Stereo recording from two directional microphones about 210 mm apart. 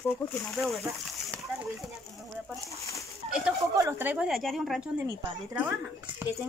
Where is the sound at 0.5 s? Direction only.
Centre (ahead or behind).